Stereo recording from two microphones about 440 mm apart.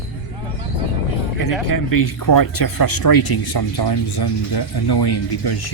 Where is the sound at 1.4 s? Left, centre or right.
Left.